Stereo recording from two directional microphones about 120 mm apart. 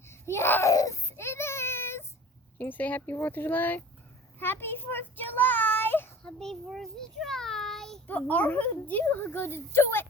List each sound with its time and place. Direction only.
0.1 s baby cry: 20° left (ahead or behind)
2.6 s a woman's voice: 15° left (ahead or behind)
6.2 s a child's voice: 5° left (ahead or behind)
8.0 s a woman's voice: 15° left (ahead or behind)